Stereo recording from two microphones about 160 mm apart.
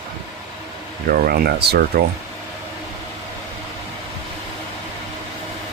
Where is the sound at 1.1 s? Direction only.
70° right (ahead or behind).